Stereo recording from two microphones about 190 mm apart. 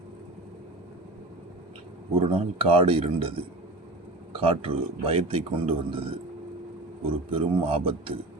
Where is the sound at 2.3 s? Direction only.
30° right (ahead or behind).